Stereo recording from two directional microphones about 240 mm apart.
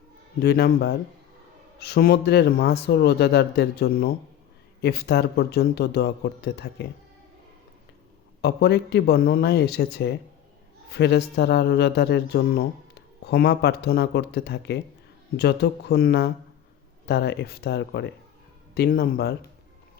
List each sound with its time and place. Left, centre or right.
0.4 s a man's voice: left
8.4 s a man's voice: left